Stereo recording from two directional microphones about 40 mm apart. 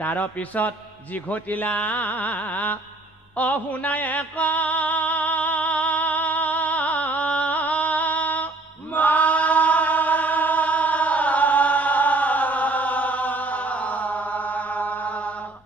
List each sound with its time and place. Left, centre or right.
0.0 s mantra: left
1.1 s speech: left
3.3 s music: left
8.9 s chant: left